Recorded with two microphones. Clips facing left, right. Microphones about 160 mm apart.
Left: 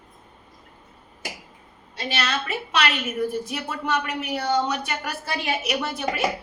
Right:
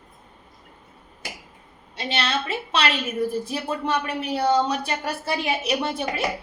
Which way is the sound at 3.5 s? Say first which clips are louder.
Right 2 dB; 30° right (ahead or behind).